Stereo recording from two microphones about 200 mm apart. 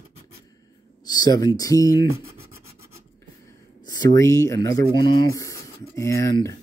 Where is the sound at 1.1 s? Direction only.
20° left (ahead or behind).